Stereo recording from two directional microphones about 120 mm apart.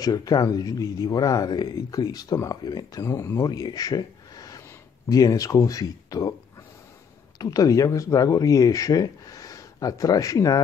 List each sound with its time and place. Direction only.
0.0 s speech: 30° left (ahead or behind)
7.3 s speech: 30° left (ahead or behind)